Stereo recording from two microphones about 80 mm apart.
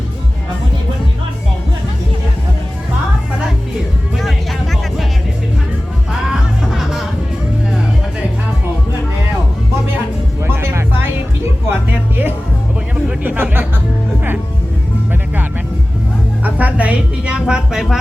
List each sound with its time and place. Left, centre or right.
4.2 s music: centre
6.2 s music: centre
10.4 s music: right
13.1 s a sound: right
16.4 s music: centre